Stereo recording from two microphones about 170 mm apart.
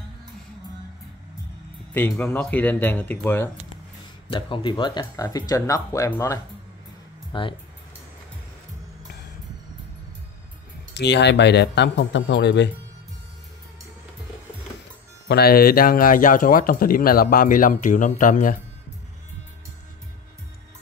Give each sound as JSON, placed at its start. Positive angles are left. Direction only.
{"t": 2.0, "sound": "speech", "side_deg": 15}
{"t": 4.3, "sound": "speech", "side_deg": 30}
{"t": 7.3, "sound": "speech", "side_deg": 30}
{"t": 11.0, "sound": "speech", "side_deg": 90}
{"t": 15.2, "sound": "speech", "side_deg": 65}